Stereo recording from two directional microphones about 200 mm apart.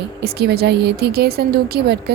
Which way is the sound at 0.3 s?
55° right (ahead or behind).